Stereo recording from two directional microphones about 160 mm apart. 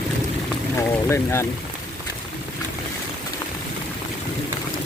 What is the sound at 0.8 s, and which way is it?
Speech, 15° left (ahead or behind).